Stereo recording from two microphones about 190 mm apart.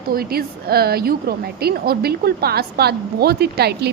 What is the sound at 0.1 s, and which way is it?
A woman's voice, 55° right (ahead or behind).